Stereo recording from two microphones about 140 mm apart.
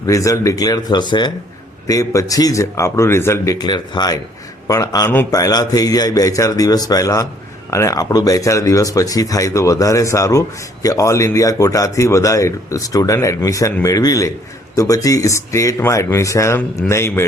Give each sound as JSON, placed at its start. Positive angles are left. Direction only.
{"t": 0.0, "sound": "a man's voice", "side_deg": 25}